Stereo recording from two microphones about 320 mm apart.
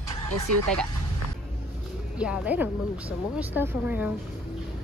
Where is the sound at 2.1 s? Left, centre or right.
Centre.